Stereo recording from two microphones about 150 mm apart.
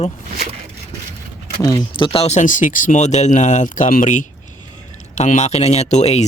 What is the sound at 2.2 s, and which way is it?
Speech, 55° left (ahead or behind).